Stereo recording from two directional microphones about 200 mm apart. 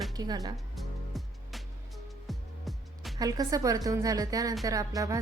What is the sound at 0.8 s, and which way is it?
Music, centre (ahead or behind).